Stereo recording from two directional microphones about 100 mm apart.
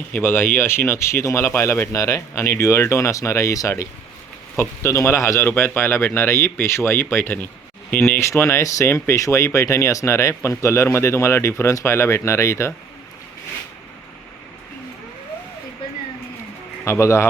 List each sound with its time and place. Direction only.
0.1 s a man's voice: 20° left (ahead or behind)
16.8 s a man's voice: 30° left (ahead or behind)